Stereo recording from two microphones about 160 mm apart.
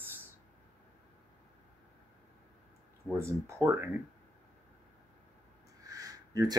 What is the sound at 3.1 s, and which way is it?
Speech, 15° right (ahead or behind).